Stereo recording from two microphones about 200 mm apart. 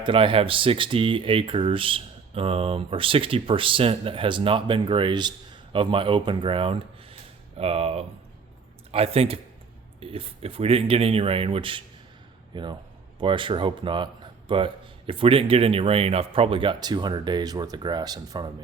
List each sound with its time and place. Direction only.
0.0 s speech: 25° right (ahead or behind)